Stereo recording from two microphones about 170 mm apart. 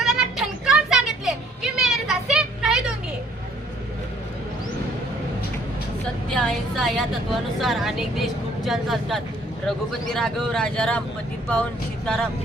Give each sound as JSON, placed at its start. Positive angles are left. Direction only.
{"t": 0.0, "sound": "a sound", "side_deg": -5}
{"t": 6.3, "sound": "a woman's voice", "side_deg": 0}
{"t": 12.0, "sound": "speech", "side_deg": 5}